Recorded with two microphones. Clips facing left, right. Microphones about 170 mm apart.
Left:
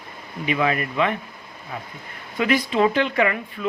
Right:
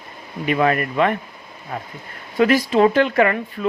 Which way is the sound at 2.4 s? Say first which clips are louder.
Right 5 dB; 40° right (ahead or behind).